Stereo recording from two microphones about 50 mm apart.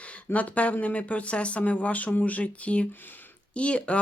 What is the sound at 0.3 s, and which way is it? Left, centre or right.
Speech, left.